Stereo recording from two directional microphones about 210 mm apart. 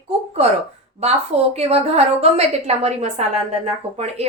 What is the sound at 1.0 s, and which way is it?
A woman's voice, 30° right (ahead or behind).